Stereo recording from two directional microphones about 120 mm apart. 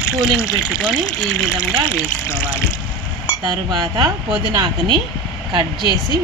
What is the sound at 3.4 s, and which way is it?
Speech, 35° right (ahead or behind).